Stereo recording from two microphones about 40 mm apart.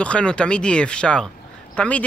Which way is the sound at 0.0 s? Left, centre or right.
Left.